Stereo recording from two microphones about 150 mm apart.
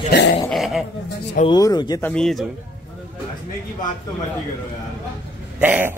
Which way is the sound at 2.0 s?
5° left (ahead or behind).